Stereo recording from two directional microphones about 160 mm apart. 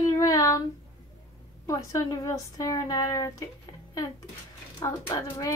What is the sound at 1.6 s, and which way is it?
A woman's voice, 20° left (ahead or behind).